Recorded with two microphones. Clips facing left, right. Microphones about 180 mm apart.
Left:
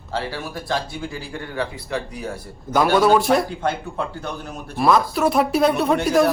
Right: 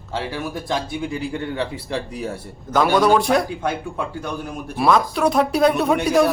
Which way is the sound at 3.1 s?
5° left (ahead or behind).